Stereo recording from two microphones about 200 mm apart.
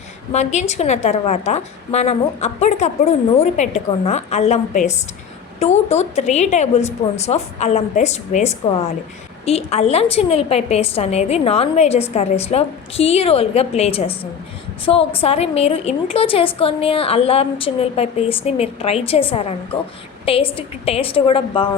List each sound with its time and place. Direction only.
0.3 s a woman's voice: 35° left (ahead or behind)